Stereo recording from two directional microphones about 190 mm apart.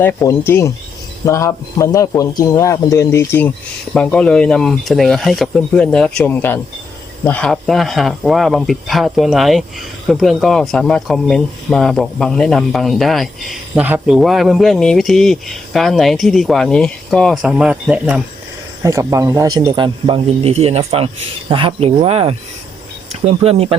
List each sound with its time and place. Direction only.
0.0 s speech: 15° left (ahead or behind); by 18.2 s 5° right (ahead or behind)
18.8 s speech: 15° right (ahead or behind); by 23.7 s 30° right (ahead or behind)